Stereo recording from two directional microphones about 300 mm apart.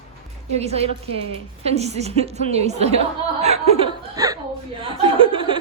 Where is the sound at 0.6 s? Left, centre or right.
Right.